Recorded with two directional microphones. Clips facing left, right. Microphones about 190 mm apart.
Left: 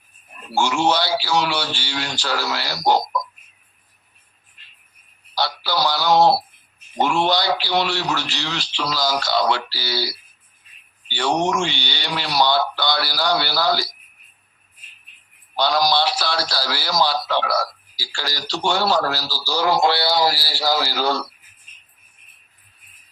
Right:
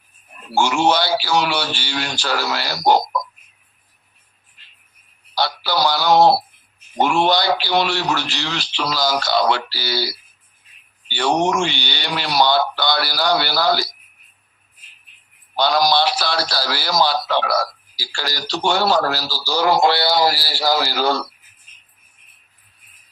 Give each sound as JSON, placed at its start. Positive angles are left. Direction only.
{"t": 0.5, "sound": "a man's voice", "side_deg": -55}
{"t": 5.3, "sound": "a man's voice", "side_deg": -55}
{"t": 11.2, "sound": "a man's voice", "side_deg": -50}
{"t": 15.5, "sound": "a man's voice", "side_deg": -50}